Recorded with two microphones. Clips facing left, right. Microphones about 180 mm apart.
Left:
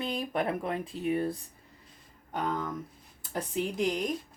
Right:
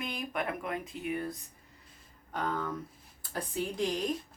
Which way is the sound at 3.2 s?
20° left (ahead or behind).